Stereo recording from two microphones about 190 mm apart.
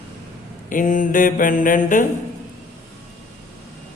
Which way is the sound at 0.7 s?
45° left (ahead or behind).